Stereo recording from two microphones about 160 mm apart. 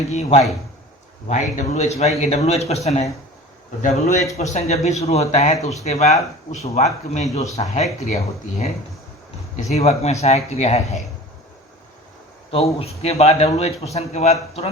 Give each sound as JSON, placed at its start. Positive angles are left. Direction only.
{"t": 0.1, "sound": "speech", "side_deg": 40}
{"t": 12.5, "sound": "speech", "side_deg": 40}